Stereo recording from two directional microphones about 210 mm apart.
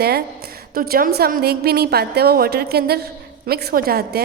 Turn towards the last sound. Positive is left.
turn(degrees=-45)  # may be behind; listen again after turning